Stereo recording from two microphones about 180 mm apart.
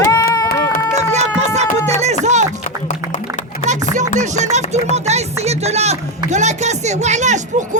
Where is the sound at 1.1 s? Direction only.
40° right (ahead or behind).